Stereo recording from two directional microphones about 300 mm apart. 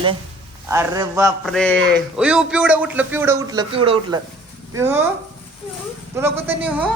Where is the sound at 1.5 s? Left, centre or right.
Centre.